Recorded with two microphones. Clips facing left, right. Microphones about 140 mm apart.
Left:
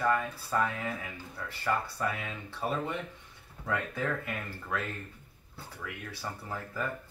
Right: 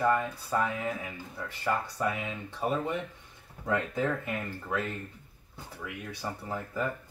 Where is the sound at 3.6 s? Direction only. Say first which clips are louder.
Right 3 dB; 20° right (ahead or behind).